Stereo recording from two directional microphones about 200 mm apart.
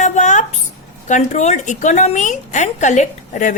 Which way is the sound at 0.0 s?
40° left (ahead or behind).